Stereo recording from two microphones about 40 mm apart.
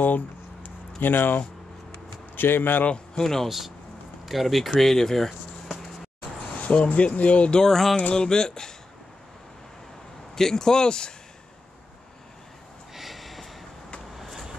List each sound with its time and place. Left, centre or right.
0.0 s a sound: left
2.3 s speech: left
3.2 s speech: centre
3.4 s speech: centre
6.6 s speech: left
7.6 s speech: centre
8.1 s music: centre
10.3 s speech: centre
12.9 s snort: centre
14.1 s vehicle: centre